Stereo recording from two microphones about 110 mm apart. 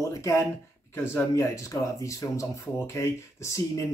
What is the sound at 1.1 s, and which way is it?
A man's voice, 25° left (ahead or behind).